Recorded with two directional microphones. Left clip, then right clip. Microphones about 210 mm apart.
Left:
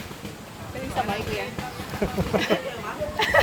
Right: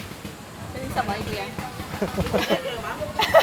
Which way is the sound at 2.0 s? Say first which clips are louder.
Even; 15° left (ahead or behind).